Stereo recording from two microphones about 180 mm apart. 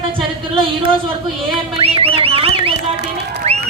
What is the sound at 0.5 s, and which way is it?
Speech, 30° right (ahead or behind).